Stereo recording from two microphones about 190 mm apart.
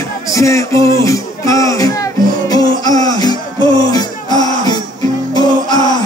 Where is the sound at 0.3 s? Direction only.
15° left (ahead or behind).